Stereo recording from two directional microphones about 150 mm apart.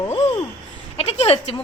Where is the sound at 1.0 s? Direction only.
40° left (ahead or behind).